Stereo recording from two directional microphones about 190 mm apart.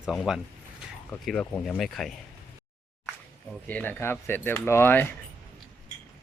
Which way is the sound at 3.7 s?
10° left (ahead or behind).